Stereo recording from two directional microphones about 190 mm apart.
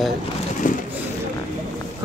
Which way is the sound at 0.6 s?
45° left (ahead or behind).